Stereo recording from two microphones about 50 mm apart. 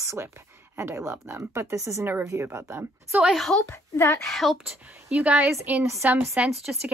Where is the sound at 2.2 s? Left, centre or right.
Right.